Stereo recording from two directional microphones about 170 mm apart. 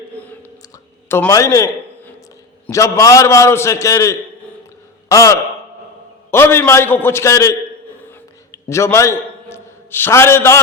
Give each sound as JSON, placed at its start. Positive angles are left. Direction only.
{"t": 0.2, "sound": "whispering", "side_deg": 10}
{"t": 1.0, "sound": "a man's voice", "side_deg": 15}
{"t": 8.5, "sound": "a man's voice", "side_deg": 15}